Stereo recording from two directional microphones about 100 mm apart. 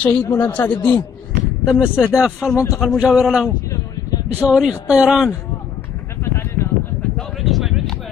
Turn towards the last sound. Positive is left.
turn(degrees=0)  # may be behind; listen again after turning